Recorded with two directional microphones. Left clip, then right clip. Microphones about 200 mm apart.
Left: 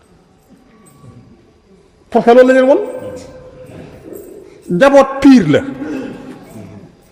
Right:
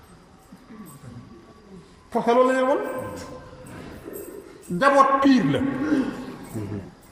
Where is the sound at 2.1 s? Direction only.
50° left (ahead or behind).